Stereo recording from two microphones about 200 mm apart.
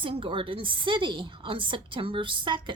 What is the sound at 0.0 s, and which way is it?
A woman's voice, 25° right (ahead or behind).